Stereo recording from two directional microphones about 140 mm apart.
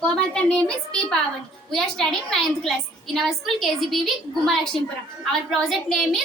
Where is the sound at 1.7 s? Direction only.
5° left (ahead or behind).